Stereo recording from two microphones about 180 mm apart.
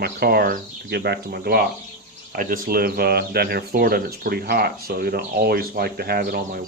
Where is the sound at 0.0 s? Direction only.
60° right (ahead or behind).